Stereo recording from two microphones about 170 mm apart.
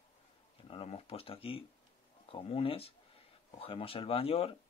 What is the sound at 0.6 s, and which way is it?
Speech, 35° left (ahead or behind).